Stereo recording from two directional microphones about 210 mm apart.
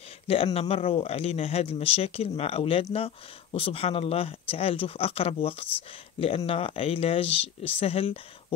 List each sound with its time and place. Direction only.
0.3 s speech: 30° left (ahead or behind)